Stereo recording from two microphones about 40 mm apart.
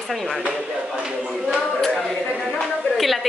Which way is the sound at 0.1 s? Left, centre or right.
Centre.